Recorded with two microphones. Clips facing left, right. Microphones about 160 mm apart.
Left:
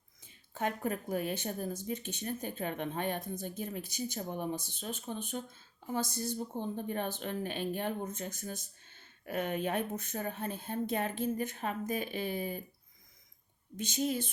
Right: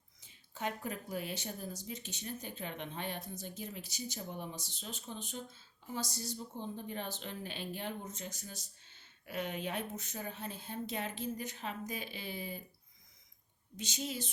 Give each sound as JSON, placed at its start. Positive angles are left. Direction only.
{"t": 0.2, "sound": "speech", "side_deg": 50}
{"t": 13.7, "sound": "speech", "side_deg": 50}